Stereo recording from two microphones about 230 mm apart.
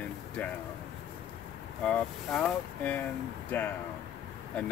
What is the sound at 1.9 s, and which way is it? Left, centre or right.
Speech, centre.